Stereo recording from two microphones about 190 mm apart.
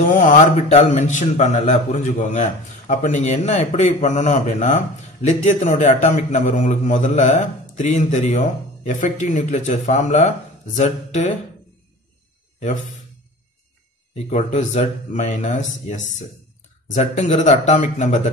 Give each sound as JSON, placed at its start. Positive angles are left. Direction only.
{"t": 0.1, "sound": "speech", "side_deg": 40}
{"t": 14.1, "sound": "speech", "side_deg": 35}
{"t": 16.8, "sound": "speech", "side_deg": 40}